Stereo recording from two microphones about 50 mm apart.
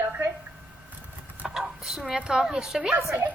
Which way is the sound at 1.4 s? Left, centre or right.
Centre.